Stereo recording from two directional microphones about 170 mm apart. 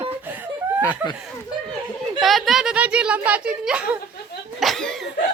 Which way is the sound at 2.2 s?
Centre (ahead or behind).